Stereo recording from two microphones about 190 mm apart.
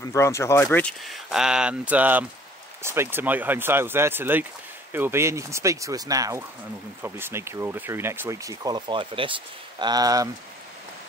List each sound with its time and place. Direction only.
0.0 s speech: 15° left (ahead or behind); by 10.3 s 20° right (ahead or behind)